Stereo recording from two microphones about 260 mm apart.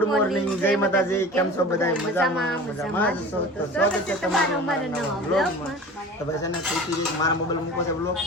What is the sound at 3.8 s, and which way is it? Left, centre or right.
Speech, centre.